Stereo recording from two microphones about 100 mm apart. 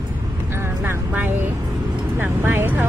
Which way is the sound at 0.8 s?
20° right (ahead or behind).